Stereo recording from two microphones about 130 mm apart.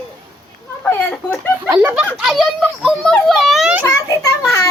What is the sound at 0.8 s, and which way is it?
Speech, 15° left (ahead or behind).